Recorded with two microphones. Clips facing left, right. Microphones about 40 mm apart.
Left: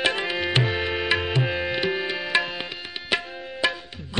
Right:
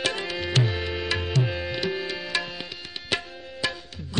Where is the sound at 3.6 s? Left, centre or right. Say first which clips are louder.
Left 5 dB; left.